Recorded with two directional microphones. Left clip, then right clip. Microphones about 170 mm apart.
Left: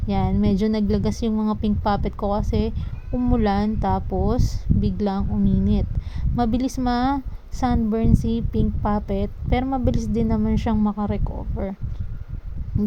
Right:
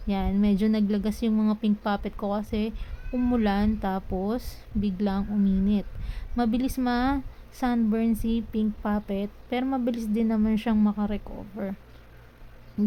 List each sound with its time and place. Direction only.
0.1 s speech: 15° left (ahead or behind)